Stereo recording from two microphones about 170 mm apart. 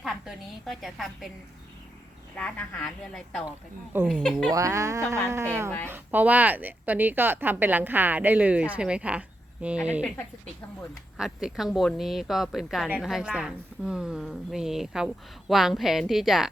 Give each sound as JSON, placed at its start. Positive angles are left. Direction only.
{"t": 0.0, "sound": "a woman's voice", "side_deg": 0}
{"t": 2.3, "sound": "speech", "side_deg": 5}
{"t": 4.5, "sound": "a woman's voice", "side_deg": -20}
{"t": 11.2, "sound": "speech", "side_deg": -5}